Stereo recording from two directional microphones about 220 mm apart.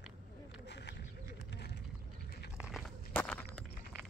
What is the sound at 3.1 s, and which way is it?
Walk, 5° left (ahead or behind).